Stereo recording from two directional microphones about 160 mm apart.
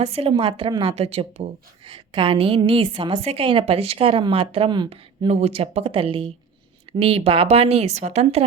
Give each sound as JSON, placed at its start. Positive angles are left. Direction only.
{"t": 0.0, "sound": "a woman's voice", "side_deg": -40}
{"t": 5.3, "sound": "a woman's voice", "side_deg": -40}